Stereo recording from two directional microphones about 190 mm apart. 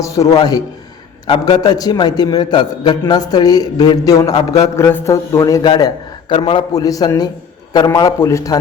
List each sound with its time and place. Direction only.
0.0 s a man's voice: 15° left (ahead or behind)